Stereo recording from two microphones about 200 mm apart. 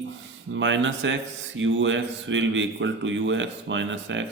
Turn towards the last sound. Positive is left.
turn(degrees=-70)  # may be behind; listen again after turning